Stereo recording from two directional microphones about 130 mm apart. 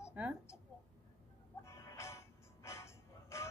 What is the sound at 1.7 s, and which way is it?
Music, 20° left (ahead or behind).